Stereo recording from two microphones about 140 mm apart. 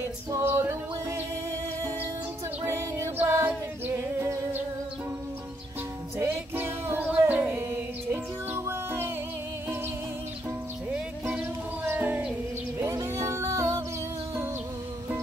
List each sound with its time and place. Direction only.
0.3 s a capella: 15° right (ahead or behind)
2.6 s music: 20° right (ahead or behind)
6.1 s music: 15° right (ahead or behind)
10.9 s music: 10° right (ahead or behind)